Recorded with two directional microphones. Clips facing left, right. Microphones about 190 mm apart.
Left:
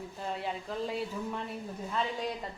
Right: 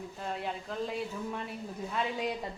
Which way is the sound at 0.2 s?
Centre (ahead or behind).